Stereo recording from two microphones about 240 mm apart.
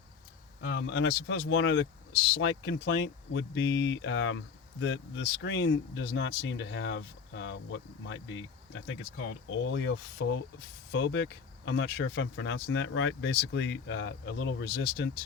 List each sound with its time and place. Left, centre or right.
0.6 s speech: left